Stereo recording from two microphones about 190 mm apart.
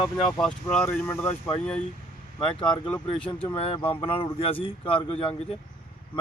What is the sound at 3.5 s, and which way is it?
Speech, 30° left (ahead or behind).